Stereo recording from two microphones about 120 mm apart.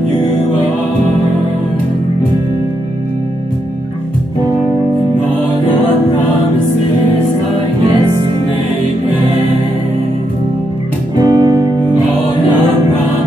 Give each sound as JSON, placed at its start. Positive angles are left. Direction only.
{"t": 11.1, "sound": "music", "side_deg": -30}